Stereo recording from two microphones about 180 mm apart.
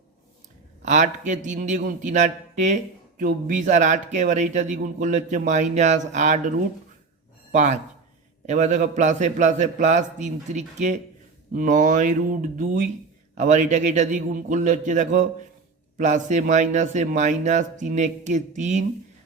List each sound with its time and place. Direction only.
0.9 s speech: 45° right (ahead or behind)
7.5 s speech: 40° right (ahead or behind)